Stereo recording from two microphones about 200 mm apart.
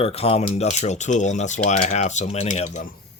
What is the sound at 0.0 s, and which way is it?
Speech, 30° left (ahead or behind).